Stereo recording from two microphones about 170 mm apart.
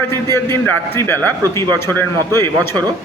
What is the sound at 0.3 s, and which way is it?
A man's voice, 15° left (ahead or behind).